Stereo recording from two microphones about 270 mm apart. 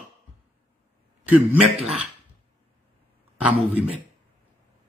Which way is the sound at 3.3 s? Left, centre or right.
Centre.